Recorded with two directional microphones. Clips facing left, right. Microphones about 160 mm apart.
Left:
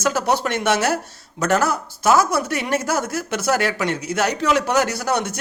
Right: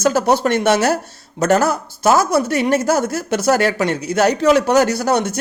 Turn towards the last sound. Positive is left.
turn(degrees=-30)  # may be behind; listen again after turning